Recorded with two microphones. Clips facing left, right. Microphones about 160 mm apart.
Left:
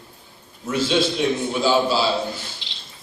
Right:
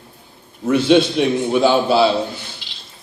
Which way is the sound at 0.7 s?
60° right (ahead or behind).